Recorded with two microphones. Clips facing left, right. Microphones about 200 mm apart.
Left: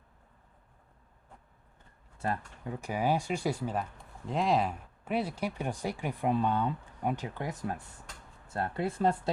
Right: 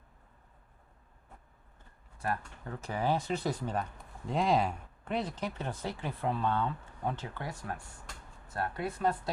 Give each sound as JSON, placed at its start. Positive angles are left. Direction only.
{"t": 2.2, "sound": "speech", "side_deg": 25}
{"t": 2.6, "sound": "speech", "side_deg": 15}